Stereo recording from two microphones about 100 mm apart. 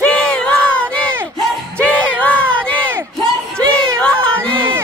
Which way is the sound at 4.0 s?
10° left (ahead or behind).